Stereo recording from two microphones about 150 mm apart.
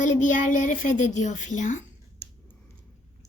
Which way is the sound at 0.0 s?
55° left (ahead or behind).